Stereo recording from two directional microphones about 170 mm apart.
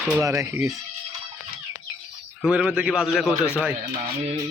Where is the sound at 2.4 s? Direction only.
5° right (ahead or behind).